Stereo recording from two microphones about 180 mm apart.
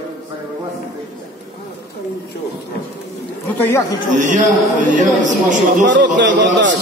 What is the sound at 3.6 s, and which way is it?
Speech, 15° left (ahead or behind).